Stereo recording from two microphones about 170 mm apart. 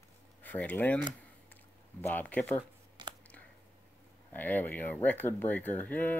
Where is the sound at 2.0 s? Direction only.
10° left (ahead or behind).